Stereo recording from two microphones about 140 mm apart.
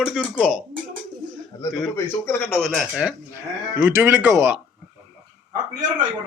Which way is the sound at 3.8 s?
15° right (ahead or behind).